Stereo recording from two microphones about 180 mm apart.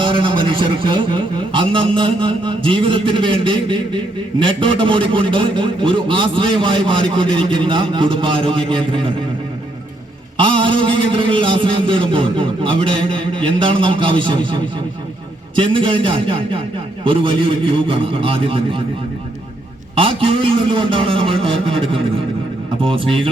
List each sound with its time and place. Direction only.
0.0 s a man's voice: 25° right (ahead or behind)
10.3 s a man's voice: 30° right (ahead or behind)
20.0 s a man's voice: 30° right (ahead or behind)